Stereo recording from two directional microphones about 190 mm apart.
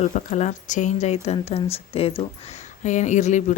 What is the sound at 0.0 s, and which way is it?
Speech, 40° left (ahead or behind).